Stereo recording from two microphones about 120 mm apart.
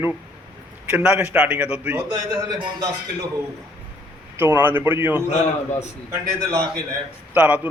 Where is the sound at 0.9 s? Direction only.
10° right (ahead or behind).